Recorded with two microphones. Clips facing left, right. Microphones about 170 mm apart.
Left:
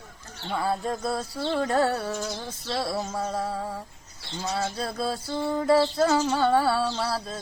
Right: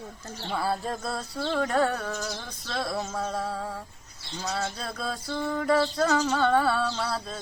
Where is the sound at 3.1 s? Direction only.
Centre (ahead or behind).